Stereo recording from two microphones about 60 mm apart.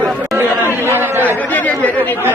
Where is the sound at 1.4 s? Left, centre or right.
Left.